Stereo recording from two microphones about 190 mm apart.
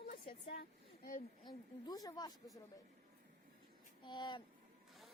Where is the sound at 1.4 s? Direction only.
20° left (ahead or behind).